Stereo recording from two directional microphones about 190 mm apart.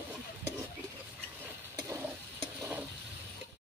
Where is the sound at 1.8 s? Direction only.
15° right (ahead or behind).